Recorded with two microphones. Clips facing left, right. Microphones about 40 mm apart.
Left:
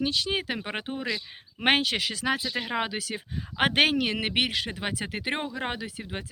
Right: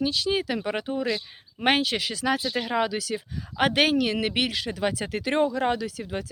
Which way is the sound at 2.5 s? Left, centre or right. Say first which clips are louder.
Right 4 dB; left.